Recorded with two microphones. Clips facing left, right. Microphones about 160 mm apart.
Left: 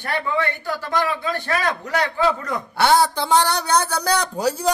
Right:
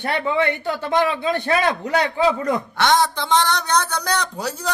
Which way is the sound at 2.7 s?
5° left (ahead or behind).